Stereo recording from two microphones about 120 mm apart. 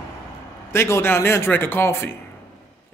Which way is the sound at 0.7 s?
20° left (ahead or behind).